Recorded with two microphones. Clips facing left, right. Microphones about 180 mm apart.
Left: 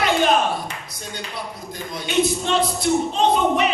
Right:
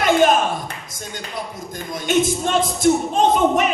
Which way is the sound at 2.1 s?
45° right (ahead or behind).